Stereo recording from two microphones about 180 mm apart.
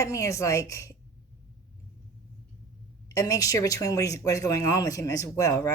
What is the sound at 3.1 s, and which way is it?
Speech, 20° left (ahead or behind).